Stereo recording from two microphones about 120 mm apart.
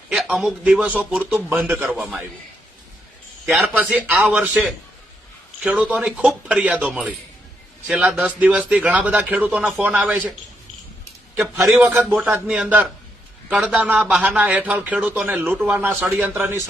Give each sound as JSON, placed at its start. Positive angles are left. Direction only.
{"t": 0.1, "sound": "a man's voice", "side_deg": -5}
{"t": 2.0, "sound": "a man's voice", "side_deg": 0}
{"t": 3.6, "sound": "a man's voice", "side_deg": -15}
{"t": 8.1, "sound": "a man's voice", "side_deg": -10}
{"t": 11.7, "sound": "a man's voice", "side_deg": -10}